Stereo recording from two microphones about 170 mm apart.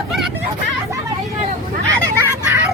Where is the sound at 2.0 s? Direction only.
15° right (ahead or behind).